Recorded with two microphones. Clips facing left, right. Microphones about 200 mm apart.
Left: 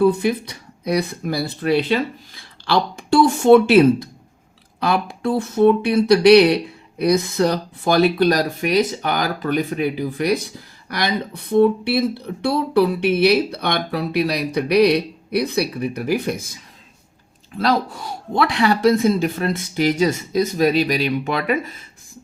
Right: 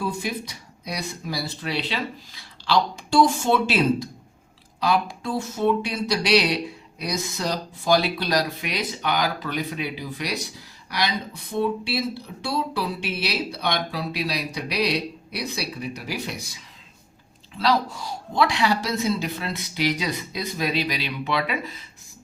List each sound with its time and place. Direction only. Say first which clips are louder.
0.0 s speech: left 11 dB; 60° left (ahead or behind)
17.6 s speech: left 3 dB; 55° left (ahead or behind)